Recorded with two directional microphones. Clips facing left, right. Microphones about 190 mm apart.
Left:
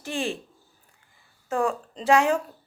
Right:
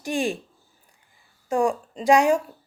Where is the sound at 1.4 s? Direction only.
15° right (ahead or behind).